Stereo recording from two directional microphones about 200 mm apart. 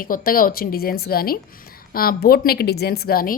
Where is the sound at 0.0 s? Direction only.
45° left (ahead or behind).